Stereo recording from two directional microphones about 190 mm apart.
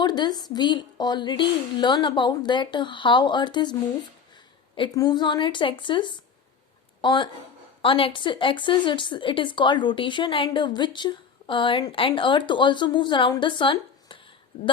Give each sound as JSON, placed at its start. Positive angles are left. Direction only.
{"t": 0.0, "sound": "speech", "side_deg": 20}